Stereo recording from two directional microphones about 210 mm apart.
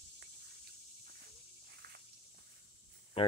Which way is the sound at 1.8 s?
45° right (ahead or behind).